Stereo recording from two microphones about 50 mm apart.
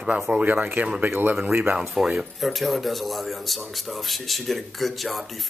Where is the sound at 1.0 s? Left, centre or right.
Right.